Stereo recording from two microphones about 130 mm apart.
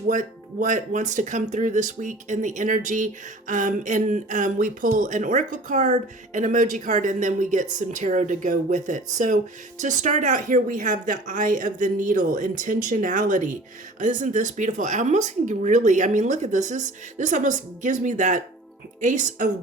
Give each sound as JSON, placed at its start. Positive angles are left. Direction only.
{"t": 0.1, "sound": "speech", "side_deg": -75}